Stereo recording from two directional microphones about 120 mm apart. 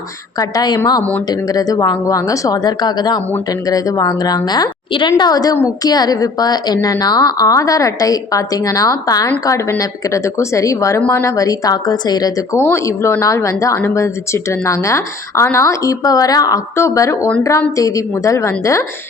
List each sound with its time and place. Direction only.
0.3 s a woman's voice: 30° left (ahead or behind)
12.5 s a woman's voice: 20° left (ahead or behind)